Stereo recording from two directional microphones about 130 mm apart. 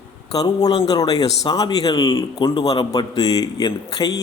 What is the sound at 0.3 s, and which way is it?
A man's voice, 30° left (ahead or behind).